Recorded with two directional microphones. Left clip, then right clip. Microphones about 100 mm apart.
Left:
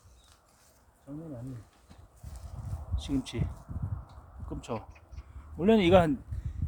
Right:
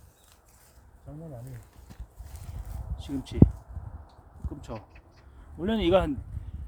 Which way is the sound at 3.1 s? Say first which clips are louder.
Left 2 dB; 35° left (ahead or behind).